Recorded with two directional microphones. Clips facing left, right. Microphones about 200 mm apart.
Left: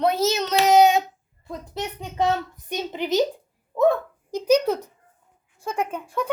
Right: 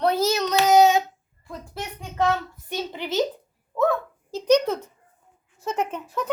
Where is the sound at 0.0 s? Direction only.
25° left (ahead or behind).